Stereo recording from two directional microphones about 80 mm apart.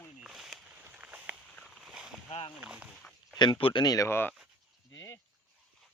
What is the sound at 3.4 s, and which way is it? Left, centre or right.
Speech, left.